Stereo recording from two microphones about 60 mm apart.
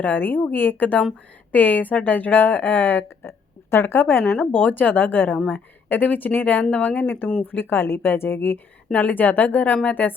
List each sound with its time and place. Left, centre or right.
0.0 s a woman's voice: left
3.2 s a sound: left
4.3 s a woman's voice: left